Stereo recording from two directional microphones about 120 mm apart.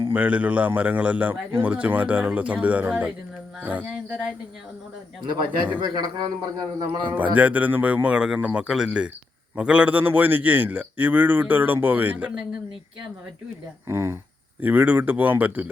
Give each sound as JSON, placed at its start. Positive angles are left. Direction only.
{"t": 0.1, "sound": "a man's voice", "side_deg": -10}
{"t": 5.2, "sound": "a man's voice", "side_deg": -40}
{"t": 7.3, "sound": "a man's voice", "side_deg": -10}
{"t": 13.8, "sound": "a man's voice", "side_deg": -20}